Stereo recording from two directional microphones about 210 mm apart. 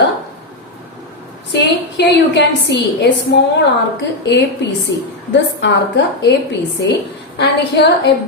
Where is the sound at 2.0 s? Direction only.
55° left (ahead or behind).